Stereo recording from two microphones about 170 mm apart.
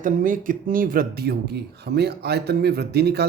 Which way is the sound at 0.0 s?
50° right (ahead or behind).